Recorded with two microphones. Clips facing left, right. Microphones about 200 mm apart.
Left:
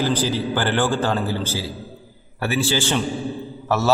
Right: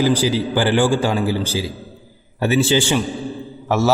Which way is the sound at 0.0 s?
10° right (ahead or behind).